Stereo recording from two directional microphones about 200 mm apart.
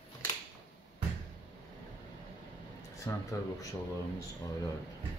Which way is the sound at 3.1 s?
15° left (ahead or behind).